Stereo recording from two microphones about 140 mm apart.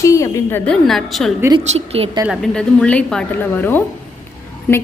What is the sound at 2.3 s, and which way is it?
A woman's voice, 5° left (ahead or behind).